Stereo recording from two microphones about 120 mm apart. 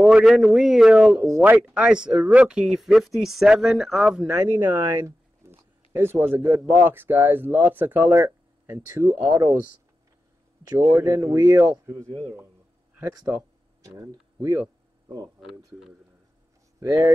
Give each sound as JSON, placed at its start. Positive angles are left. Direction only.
{"t": 0.0, "sound": "speech", "side_deg": -5}
{"t": 4.3, "sound": "speech", "side_deg": -25}
{"t": 4.6, "sound": "a sound", "side_deg": -15}
{"t": 6.8, "sound": "speech", "side_deg": -15}
{"t": 10.7, "sound": "speech", "side_deg": -25}
{"t": 13.8, "sound": "speech", "side_deg": -20}